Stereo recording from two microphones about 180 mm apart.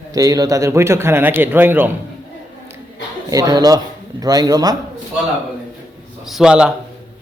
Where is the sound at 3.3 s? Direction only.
20° right (ahead or behind).